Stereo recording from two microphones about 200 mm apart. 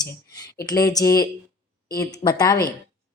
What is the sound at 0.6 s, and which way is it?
A woman's voice, 20° left (ahead or behind).